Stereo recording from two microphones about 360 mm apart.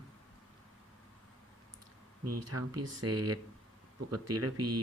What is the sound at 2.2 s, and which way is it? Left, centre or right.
Speech, right.